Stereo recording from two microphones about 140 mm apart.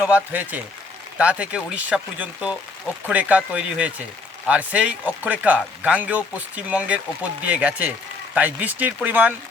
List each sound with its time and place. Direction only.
0.0 s speech: 10° right (ahead or behind)